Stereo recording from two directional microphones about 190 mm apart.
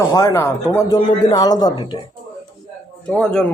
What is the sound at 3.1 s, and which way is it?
Speech, 5° left (ahead or behind).